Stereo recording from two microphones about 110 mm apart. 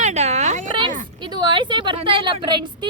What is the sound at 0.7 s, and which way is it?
Speech, 45° right (ahead or behind).